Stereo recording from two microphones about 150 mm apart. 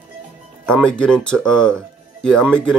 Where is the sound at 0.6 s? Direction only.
5° left (ahead or behind).